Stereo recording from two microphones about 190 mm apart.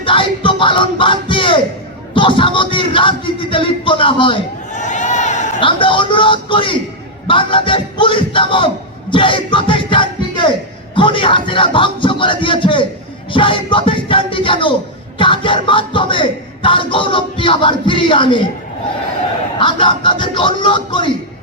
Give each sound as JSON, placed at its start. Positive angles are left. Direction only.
{"t": 0.0, "sound": "a sound", "side_deg": 25}
{"t": 2.1, "sound": "speech", "side_deg": 25}
{"t": 4.7, "sound": "crowd", "side_deg": 40}
{"t": 5.5, "sound": "speech", "side_deg": 25}
{"t": 19.5, "sound": "speech", "side_deg": 25}